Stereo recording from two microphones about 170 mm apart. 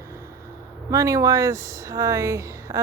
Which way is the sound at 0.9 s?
20° right (ahead or behind).